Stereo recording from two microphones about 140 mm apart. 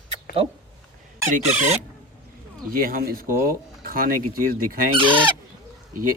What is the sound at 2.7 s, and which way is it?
Speech, 90° right.